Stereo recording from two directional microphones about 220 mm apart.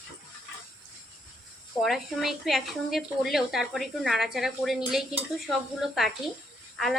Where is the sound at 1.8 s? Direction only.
Centre (ahead or behind).